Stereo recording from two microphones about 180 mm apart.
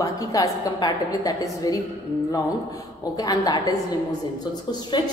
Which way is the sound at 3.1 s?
20° left (ahead or behind).